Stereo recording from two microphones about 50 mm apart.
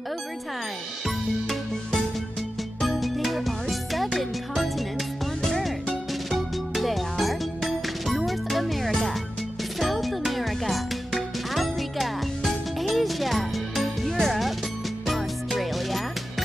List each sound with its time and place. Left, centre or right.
1.0 s music: centre